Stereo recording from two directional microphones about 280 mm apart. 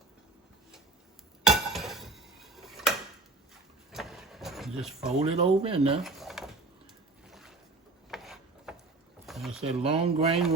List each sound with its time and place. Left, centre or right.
1.5 s dishes: centre
3.9 s vehicle: centre
5.2 s speech: right
6.0 s a sound: centre
7.3 s boat: centre
8.1 s wood: centre
9.2 s boat: centre
9.6 s speech: right